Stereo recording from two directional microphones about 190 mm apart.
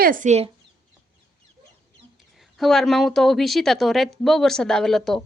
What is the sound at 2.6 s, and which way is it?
A woman's voice, centre (ahead or behind).